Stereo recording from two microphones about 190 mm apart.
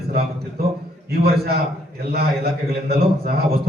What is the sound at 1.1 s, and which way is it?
A man's voice, 55° right (ahead or behind).